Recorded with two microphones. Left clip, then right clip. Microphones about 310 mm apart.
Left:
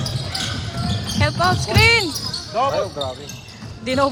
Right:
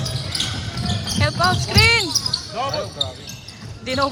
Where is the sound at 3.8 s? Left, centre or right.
Centre.